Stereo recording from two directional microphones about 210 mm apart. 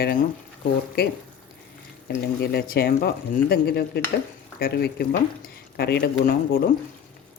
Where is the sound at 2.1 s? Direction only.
50° left (ahead or behind).